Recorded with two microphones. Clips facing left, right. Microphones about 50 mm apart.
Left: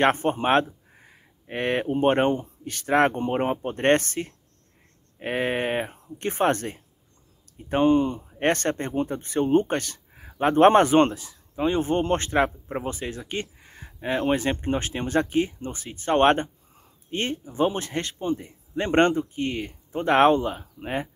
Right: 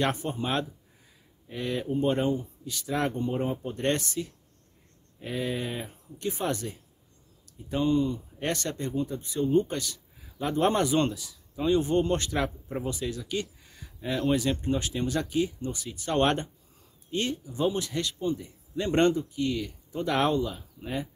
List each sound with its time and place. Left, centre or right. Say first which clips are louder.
0.0 s speech: left 8 dB; left